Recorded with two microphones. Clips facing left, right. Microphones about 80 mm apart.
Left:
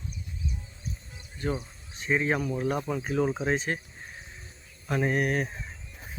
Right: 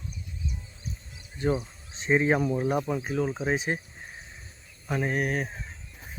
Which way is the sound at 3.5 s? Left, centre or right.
Centre.